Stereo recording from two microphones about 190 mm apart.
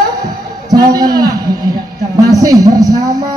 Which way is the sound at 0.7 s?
20° right (ahead or behind).